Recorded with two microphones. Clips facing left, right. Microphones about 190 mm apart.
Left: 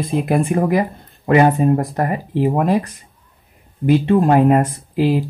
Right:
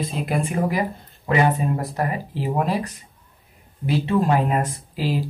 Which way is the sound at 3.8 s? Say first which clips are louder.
Left 7 dB; 50° left (ahead or behind).